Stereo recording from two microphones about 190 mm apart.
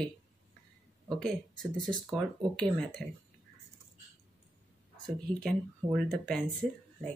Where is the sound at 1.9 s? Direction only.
25° right (ahead or behind).